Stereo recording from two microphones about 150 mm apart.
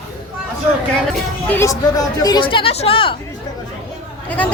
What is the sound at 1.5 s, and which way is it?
Speech, 20° left (ahead or behind).